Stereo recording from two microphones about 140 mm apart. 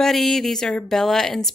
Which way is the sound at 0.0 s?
Centre (ahead or behind).